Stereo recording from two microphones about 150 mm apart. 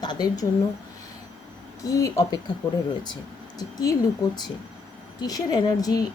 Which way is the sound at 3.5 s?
25° left (ahead or behind).